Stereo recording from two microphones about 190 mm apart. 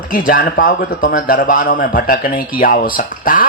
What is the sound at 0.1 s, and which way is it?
Speech, 50° left (ahead or behind).